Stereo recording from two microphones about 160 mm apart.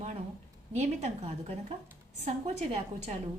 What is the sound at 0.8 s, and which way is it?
A woman's voice, 40° right (ahead or behind).